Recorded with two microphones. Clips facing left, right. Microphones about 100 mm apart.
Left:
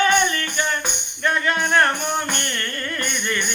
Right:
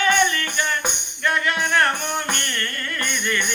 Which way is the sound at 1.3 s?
30° left (ahead or behind).